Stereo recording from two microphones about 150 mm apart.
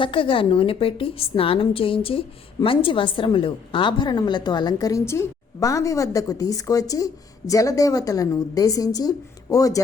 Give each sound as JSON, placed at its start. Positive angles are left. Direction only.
{"t": 0.0, "sound": "a woman's voice", "side_deg": 35}